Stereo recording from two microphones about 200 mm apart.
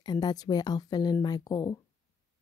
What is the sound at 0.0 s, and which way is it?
Speech, 20° left (ahead or behind).